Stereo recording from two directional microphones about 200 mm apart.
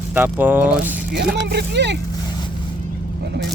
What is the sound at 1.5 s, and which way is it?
Speech, 55° right (ahead or behind).